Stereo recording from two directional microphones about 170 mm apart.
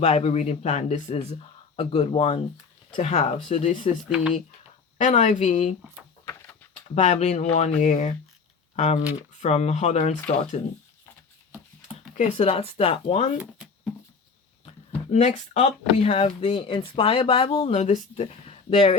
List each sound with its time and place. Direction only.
0.0 s speech: 35° left (ahead or behind)
4.1 s speech: 5° right (ahead or behind)
4.9 s speech: 45° left (ahead or behind)
6.9 s speech: 40° left (ahead or behind)
12.1 s speech: 40° left (ahead or behind)
15.1 s speech: 40° left (ahead or behind)